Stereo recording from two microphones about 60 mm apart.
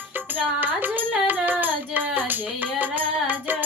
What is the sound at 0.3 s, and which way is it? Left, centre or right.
Singing, right.